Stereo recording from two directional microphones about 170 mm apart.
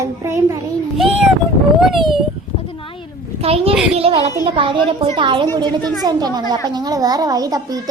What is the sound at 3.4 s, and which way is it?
A woman's voice, 35° right (ahead or behind).